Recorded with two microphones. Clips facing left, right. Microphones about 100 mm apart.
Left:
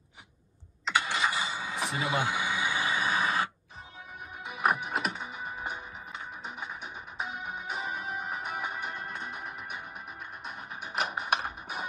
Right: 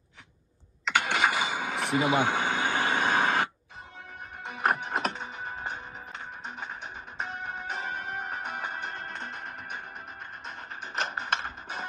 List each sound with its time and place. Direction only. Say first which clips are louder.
0.8 s engine starting: right 3 dB; 65° right (ahead or behind)
4.5 s music: even; 10° left (ahead or behind)
7.2 s music: right 3 dB; 10° left (ahead or behind)